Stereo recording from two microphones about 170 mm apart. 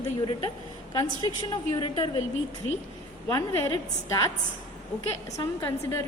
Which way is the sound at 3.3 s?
20° left (ahead or behind).